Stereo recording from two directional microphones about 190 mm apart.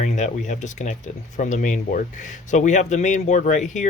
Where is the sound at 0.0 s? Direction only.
40° left (ahead or behind).